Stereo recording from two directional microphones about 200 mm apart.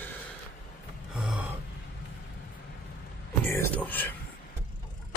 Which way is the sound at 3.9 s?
10° left (ahead or behind).